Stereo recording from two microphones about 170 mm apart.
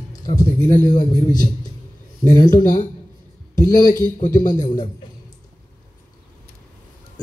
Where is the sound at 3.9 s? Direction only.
50° left (ahead or behind).